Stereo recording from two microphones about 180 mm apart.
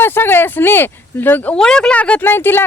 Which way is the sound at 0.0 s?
10° left (ahead or behind).